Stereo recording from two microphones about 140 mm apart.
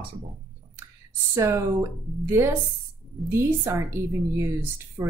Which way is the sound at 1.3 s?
20° right (ahead or behind).